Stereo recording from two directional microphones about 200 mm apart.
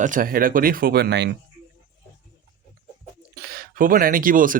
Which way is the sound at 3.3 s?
50° right (ahead or behind).